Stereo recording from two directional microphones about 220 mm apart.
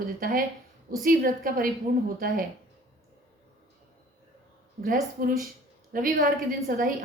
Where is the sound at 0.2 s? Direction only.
40° right (ahead or behind).